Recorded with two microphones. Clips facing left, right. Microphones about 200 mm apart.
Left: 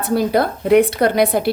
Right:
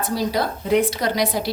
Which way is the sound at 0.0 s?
55° left (ahead or behind).